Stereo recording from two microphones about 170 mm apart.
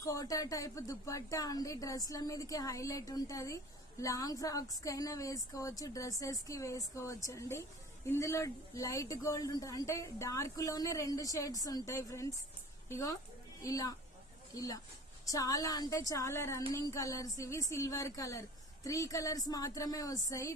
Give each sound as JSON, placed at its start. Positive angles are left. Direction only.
{"t": 0.0, "sound": "a woman's voice", "side_deg": 20}
{"t": 13.6, "sound": "speech", "side_deg": 20}